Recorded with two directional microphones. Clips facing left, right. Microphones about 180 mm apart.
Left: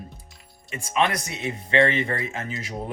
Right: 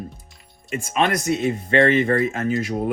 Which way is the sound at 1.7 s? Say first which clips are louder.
Right 4 dB; 45° right (ahead or behind).